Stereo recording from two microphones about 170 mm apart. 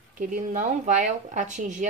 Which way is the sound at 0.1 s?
50° right (ahead or behind).